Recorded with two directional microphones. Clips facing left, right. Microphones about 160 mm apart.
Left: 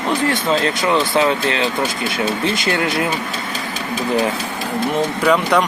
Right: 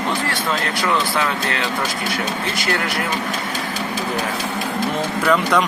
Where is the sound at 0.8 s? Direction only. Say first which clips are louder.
Left 4 dB; 25° left (ahead or behind).